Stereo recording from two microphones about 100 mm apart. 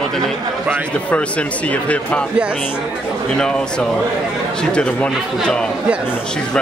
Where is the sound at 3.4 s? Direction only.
10° left (ahead or behind).